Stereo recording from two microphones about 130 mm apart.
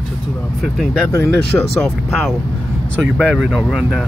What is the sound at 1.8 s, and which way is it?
Speech, 5° right (ahead or behind).